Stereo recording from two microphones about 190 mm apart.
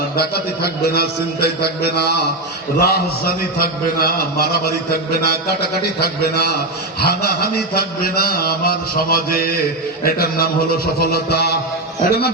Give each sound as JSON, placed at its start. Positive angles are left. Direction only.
{"t": 0.2, "sound": "a man's voice", "side_deg": 55}
{"t": 7.0, "sound": "mantra", "side_deg": 55}
{"t": 11.0, "sound": "a man's voice", "side_deg": 55}